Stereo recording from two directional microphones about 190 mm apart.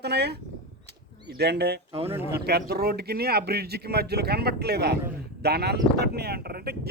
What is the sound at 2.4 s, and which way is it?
A man's voice, 55° right (ahead or behind).